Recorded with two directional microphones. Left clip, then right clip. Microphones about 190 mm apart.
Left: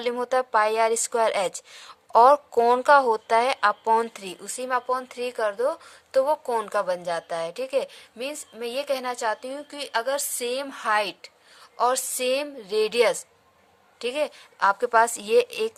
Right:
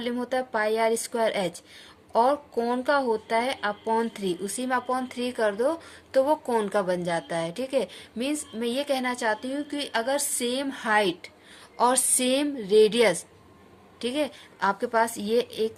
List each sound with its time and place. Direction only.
0.0 s a woman's voice: 45° left (ahead or behind)